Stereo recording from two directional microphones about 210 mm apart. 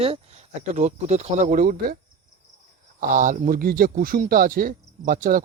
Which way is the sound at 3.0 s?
40° right (ahead or behind).